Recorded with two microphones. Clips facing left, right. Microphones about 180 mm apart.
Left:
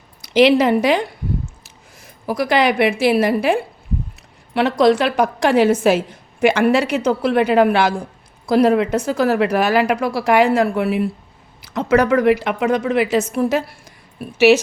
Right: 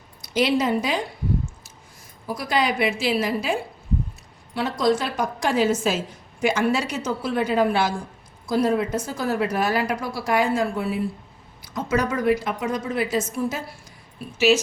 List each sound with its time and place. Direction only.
0.3 s a woman's voice: 70° left (ahead or behind)
2.2 s a woman's voice: 75° left (ahead or behind)